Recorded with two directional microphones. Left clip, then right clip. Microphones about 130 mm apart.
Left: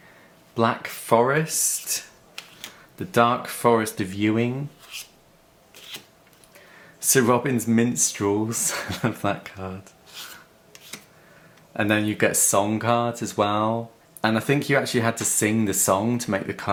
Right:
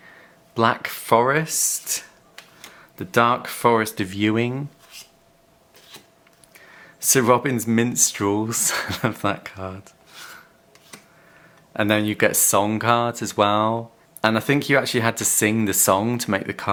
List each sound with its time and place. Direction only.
0.5 s speech: 35° right (ahead or behind)
3.1 s speech: 35° right (ahead or behind)
4.9 s writing: 5° left (ahead or behind)
7.0 s speech: 35° right (ahead or behind)
11.8 s speech: 35° right (ahead or behind)